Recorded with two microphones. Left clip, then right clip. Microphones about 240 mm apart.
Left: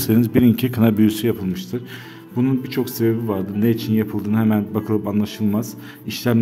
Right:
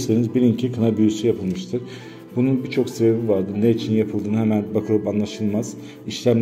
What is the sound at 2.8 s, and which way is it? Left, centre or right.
Speech, left.